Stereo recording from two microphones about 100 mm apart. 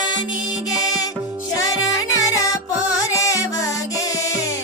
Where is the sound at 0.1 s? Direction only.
40° left (ahead or behind).